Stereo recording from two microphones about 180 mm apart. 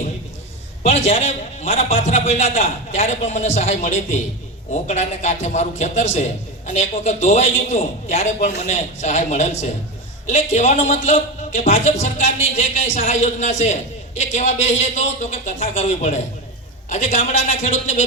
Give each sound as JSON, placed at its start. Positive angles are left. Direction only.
{"t": 0.8, "sound": "a man's voice", "side_deg": 35}